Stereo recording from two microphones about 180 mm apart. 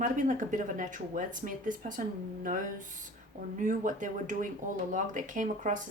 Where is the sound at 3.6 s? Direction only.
45° right (ahead or behind).